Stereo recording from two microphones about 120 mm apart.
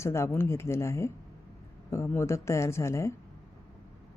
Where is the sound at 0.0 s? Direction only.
20° left (ahead or behind).